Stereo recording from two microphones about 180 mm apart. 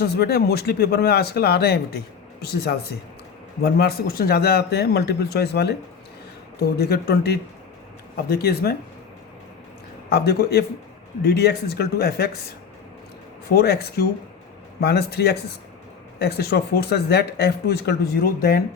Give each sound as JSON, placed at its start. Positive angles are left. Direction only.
{"t": 0.0, "sound": "speech", "side_deg": 60}
{"t": 10.1, "sound": "speech", "side_deg": 60}
{"t": 13.5, "sound": "speech", "side_deg": 60}